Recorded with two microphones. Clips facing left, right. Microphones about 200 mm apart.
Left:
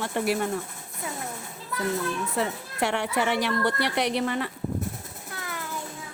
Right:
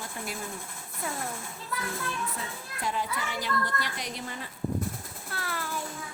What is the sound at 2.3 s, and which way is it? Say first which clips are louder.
A woman's voice: left 11 dB; 75° left (ahead or behind).